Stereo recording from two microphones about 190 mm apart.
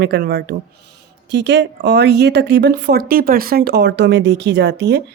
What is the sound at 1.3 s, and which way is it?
Speech, 65° right (ahead or behind).